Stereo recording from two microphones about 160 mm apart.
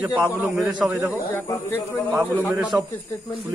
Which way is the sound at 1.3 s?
15° left (ahead or behind).